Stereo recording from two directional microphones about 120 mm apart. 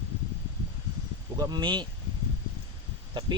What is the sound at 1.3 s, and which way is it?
Speech, 35° right (ahead or behind).